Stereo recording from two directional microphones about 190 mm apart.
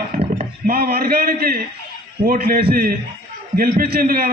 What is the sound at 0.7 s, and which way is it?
A man's voice, 55° right (ahead or behind).